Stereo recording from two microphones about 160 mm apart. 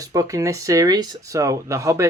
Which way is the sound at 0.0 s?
20° right (ahead or behind).